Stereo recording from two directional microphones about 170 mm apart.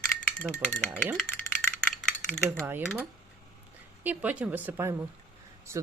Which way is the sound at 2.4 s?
15° right (ahead or behind).